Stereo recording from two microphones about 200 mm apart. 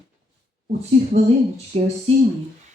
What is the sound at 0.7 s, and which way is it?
Speech, 35° right (ahead or behind).